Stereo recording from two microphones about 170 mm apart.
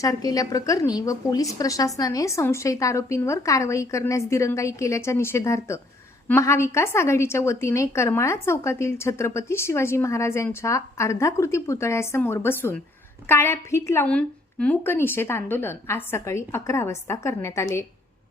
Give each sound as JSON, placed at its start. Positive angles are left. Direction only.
{"t": 0.0, "sound": "a woman's voice", "side_deg": 20}